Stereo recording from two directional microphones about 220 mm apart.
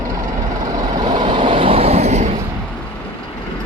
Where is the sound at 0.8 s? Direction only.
15° right (ahead or behind).